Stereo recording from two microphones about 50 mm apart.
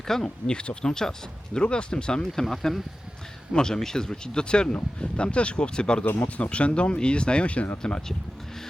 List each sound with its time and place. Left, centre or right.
0.1 s speech: centre
6.1 s speech: left